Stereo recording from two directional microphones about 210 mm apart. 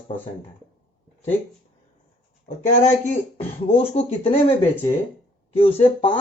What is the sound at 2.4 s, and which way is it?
Speech, 35° left (ahead or behind).